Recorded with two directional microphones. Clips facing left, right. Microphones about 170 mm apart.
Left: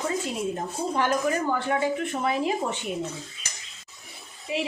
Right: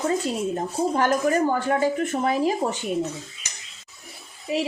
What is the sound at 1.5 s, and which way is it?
A woman's voice, 40° right (ahead or behind).